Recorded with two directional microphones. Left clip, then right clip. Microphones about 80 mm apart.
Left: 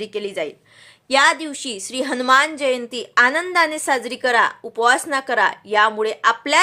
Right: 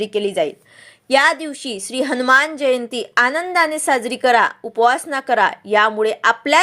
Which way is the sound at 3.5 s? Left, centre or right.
Centre.